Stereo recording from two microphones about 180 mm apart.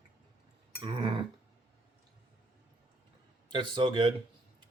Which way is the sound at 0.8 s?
25° right (ahead or behind).